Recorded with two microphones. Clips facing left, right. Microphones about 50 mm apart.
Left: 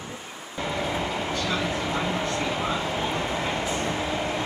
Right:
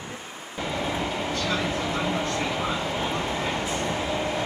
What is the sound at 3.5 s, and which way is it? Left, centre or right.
Train, left.